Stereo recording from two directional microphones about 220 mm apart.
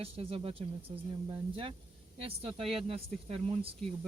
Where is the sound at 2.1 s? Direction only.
25° right (ahead or behind).